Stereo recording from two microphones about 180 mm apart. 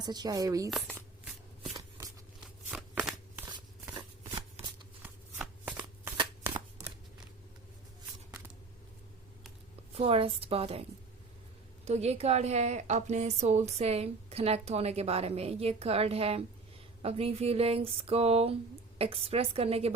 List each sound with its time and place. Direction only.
0.0 s speech: 25° right (ahead or behind)
0.7 s shuffling cards: 5° right (ahead or behind)
3.9 s shuffling cards: 25° right (ahead or behind)
5.0 s shuffling cards: 10° right (ahead or behind)
9.9 s a woman's voice: 30° right (ahead or behind)
11.9 s a woman's voice: 35° right (ahead or behind)